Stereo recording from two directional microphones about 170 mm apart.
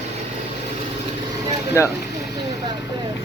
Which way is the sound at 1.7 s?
15° left (ahead or behind).